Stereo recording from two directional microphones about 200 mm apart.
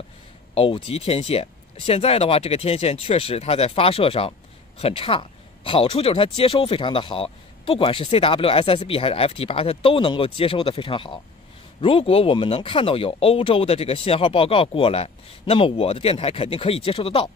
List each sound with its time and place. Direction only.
0.6 s speech: 25° left (ahead or behind)